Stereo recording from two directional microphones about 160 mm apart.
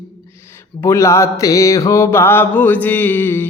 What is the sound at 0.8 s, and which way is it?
Music, 20° left (ahead or behind).